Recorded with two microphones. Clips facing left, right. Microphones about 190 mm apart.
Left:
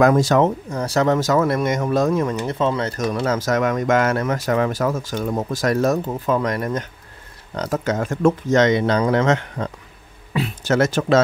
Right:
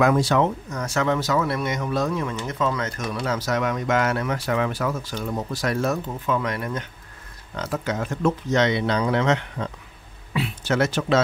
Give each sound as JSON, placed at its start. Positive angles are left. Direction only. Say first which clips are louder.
{"t": 0.0, "sound": "speech", "louder": "left 4 dB", "side_deg": 45}
{"t": 0.7, "sound": "speech", "louder": "left 5 dB", "side_deg": 30}
{"t": 2.6, "sound": "speech", "louder": "left 4 dB", "side_deg": 30}
{"t": 10.3, "sound": "a sound", "louder": "left 4 dB", "side_deg": 40}